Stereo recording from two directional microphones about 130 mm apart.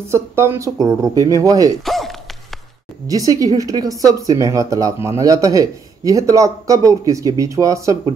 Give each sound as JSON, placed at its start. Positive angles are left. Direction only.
{"t": 0.1, "sound": "speech", "side_deg": -20}
{"t": 1.9, "sound": "a sound", "side_deg": 0}
{"t": 3.1, "sound": "speech", "side_deg": -25}